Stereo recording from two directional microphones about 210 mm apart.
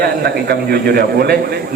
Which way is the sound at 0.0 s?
50° right (ahead or behind).